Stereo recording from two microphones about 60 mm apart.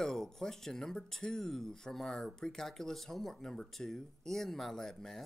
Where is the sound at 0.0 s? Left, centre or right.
Centre.